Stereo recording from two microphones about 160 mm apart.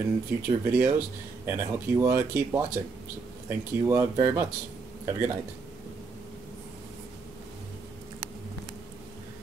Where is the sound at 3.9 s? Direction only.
20° right (ahead or behind).